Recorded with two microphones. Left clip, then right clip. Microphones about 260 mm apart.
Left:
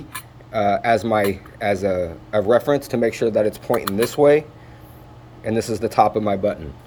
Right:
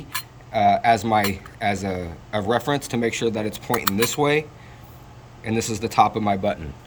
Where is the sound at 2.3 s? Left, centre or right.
Right.